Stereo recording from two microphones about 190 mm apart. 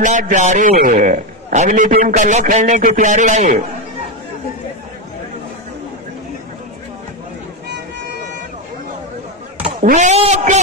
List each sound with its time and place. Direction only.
0.0 s a man's voice: 40° right (ahead or behind)
9.6 s speech: 45° right (ahead or behind)